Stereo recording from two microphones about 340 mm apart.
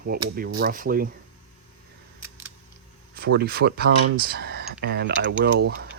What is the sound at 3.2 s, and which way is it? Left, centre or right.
Speech, right.